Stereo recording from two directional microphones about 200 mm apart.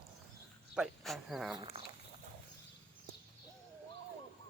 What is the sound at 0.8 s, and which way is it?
Speech, centre (ahead or behind).